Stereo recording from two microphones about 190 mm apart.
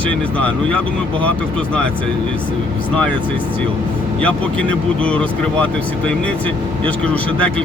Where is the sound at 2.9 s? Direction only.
5° left (ahead or behind).